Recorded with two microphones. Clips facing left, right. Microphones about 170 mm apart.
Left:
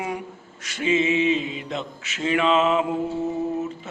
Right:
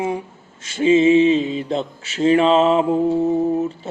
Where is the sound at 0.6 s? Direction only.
30° right (ahead or behind).